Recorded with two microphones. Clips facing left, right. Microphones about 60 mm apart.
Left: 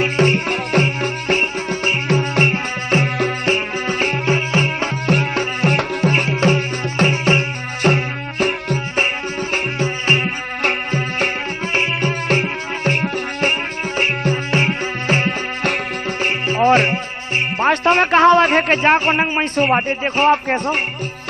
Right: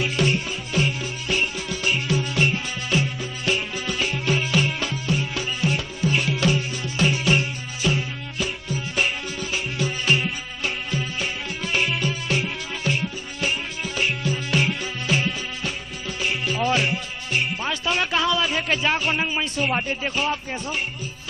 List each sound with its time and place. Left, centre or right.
0.0 s music: left
0.5 s music: left
5.1 s music: left
8.9 s music: left